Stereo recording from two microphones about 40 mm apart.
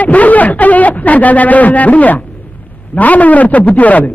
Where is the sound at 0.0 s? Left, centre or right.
Left.